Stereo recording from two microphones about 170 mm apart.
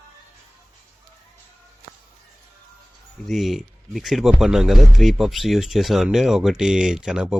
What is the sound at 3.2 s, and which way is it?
Speech, centre (ahead or behind).